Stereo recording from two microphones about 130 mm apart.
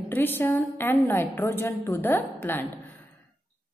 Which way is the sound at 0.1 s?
15° left (ahead or behind).